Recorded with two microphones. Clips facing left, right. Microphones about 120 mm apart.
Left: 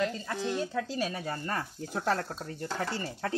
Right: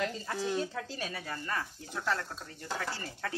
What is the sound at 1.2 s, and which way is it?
Speech, 35° left (ahead or behind).